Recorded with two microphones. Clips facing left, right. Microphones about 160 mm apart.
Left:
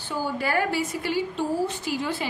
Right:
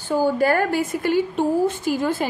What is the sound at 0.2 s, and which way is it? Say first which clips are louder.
A woman's voice: right 6 dB; 45° right (ahead or behind).